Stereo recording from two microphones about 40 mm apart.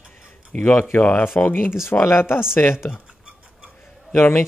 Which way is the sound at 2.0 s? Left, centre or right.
Left.